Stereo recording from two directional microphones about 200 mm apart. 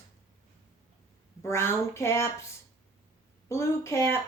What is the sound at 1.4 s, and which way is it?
Speech, 15° left (ahead or behind).